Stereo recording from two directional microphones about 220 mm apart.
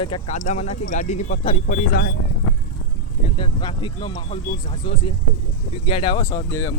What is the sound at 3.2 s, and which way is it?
Speech, 20° left (ahead or behind).